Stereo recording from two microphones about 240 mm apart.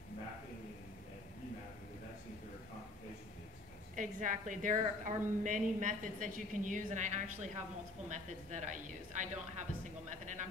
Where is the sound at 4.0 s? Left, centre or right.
Right.